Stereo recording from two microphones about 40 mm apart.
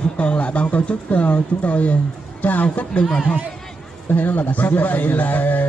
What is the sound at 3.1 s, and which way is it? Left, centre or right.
Speech, centre.